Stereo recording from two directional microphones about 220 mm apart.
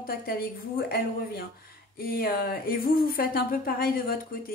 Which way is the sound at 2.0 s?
45° left (ahead or behind).